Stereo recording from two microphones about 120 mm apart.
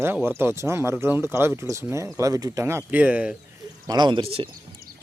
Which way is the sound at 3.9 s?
40° right (ahead or behind).